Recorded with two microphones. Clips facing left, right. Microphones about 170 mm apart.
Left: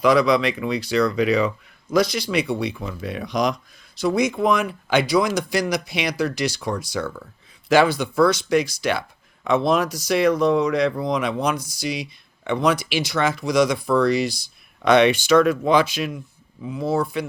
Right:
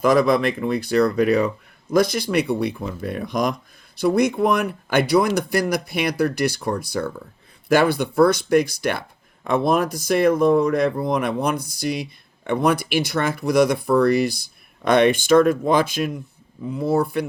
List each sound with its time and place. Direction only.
0.0 s speech: 50° right (ahead or behind)
7.0 s speech: 35° right (ahead or behind)
7.7 s speech: 55° right (ahead or behind)